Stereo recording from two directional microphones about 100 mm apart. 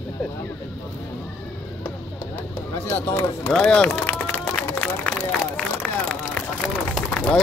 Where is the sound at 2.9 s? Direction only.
20° left (ahead or behind).